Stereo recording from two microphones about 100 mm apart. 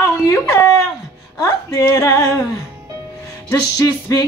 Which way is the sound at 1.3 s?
35° left (ahead or behind).